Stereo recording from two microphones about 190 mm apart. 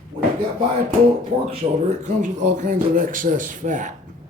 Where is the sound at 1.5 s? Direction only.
40° right (ahead or behind).